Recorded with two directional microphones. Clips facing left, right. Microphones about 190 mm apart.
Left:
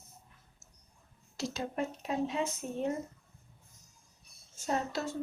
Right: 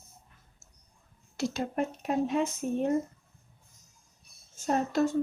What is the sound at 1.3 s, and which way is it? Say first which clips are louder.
Speech: right 5 dB; 55° right (ahead or behind).